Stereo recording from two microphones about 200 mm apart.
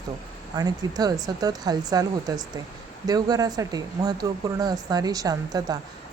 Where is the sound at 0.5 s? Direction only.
20° right (ahead or behind).